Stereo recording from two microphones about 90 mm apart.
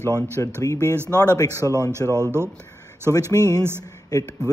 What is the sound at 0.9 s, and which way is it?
Speech, 25° right (ahead or behind).